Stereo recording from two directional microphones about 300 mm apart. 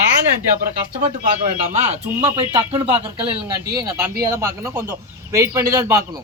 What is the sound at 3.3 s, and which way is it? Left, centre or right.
A man's voice, centre.